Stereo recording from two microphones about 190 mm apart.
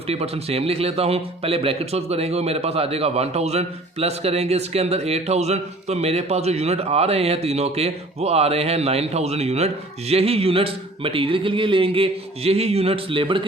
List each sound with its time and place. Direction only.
0.1 s a man's voice: 30° right (ahead or behind)